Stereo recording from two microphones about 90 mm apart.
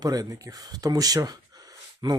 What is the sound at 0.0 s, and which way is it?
Speech, 45° right (ahead or behind).